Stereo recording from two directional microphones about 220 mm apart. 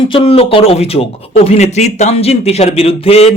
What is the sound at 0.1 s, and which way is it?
Speech, 25° left (ahead or behind).